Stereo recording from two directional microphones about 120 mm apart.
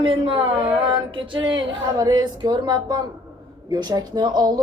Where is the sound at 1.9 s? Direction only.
35° right (ahead or behind).